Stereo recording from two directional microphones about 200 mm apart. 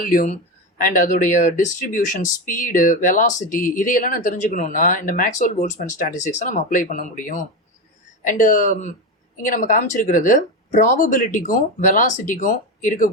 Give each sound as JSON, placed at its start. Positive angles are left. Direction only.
{"t": 0.0, "sound": "speech", "side_deg": 45}